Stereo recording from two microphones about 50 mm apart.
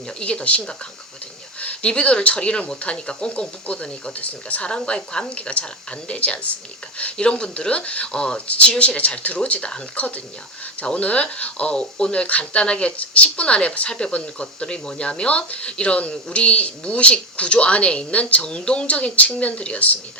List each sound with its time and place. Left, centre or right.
0.2 s speech: left
1.6 s speech: left